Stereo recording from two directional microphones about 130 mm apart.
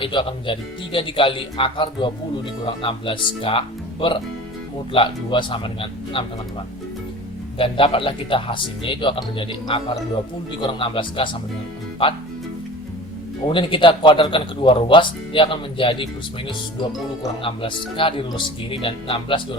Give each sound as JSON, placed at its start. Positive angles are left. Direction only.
{"t": 0.0, "sound": "speech", "side_deg": 40}
{"t": 7.6, "sound": "speech", "side_deg": 45}
{"t": 13.5, "sound": "speech", "side_deg": 40}
{"t": 17.4, "sound": "speech", "side_deg": 40}